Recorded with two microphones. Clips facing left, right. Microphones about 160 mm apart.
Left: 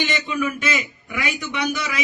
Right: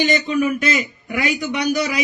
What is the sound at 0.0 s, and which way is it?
A man's voice, 40° right (ahead or behind).